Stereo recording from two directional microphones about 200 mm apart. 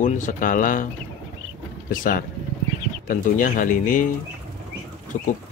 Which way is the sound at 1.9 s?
40° left (ahead or behind).